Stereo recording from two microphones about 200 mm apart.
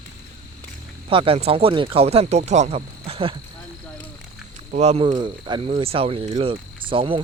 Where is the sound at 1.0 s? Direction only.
25° right (ahead or behind).